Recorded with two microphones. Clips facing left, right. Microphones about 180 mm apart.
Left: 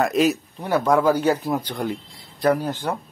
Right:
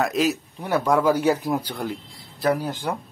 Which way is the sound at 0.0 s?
Centre (ahead or behind).